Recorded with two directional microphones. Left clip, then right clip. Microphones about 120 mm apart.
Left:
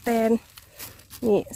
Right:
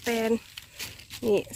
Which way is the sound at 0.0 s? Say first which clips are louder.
Left 4 dB; 70° left (ahead or behind).